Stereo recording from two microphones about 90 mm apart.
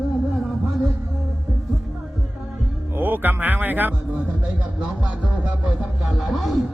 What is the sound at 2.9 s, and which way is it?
Speech, 20° right (ahead or behind).